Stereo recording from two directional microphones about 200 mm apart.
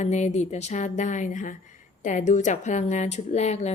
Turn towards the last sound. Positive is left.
turn(degrees=35)  # may be behind; listen again after turning